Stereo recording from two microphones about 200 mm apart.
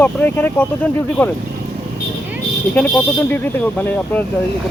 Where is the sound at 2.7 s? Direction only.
5° left (ahead or behind).